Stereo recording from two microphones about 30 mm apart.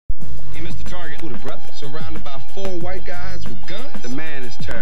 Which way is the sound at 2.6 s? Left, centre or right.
Right.